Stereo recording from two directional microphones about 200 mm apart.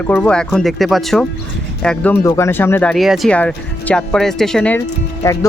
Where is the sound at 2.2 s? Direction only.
15° left (ahead or behind).